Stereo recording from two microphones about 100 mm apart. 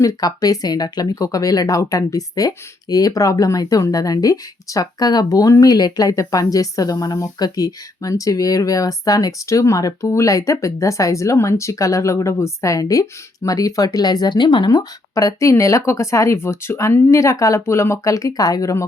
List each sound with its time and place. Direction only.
0.0 s speech: 40° left (ahead or behind)